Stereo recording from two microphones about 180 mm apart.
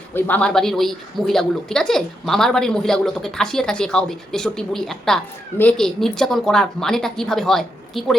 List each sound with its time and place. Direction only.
0.1 s a woman's voice: 10° left (ahead or behind)